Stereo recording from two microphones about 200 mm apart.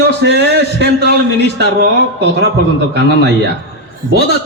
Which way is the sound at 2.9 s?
55° right (ahead or behind).